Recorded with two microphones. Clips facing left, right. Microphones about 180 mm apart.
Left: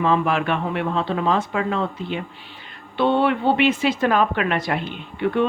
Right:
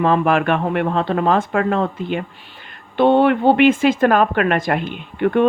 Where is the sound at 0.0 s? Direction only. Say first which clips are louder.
Right 4 dB; 55° right (ahead or behind).